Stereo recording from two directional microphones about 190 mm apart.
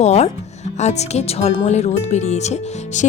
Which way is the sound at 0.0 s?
35° left (ahead or behind).